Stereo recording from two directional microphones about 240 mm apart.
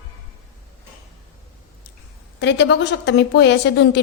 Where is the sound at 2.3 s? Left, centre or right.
Left.